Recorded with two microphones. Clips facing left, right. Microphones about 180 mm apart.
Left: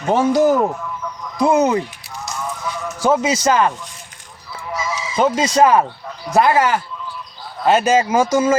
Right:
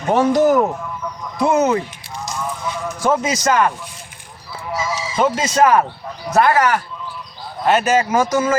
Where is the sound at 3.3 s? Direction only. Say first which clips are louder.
Left 1 dB; 25° left (ahead or behind).